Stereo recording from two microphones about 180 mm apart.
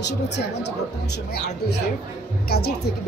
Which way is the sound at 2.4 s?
60° left (ahead or behind).